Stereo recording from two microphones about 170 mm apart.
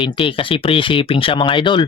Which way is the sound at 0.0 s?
30° left (ahead or behind).